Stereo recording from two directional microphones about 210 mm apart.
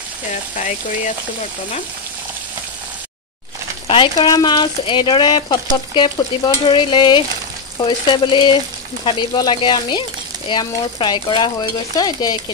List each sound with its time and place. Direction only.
0.3 s speech: 35° left (ahead or behind)
3.8 s speech: 25° left (ahead or behind)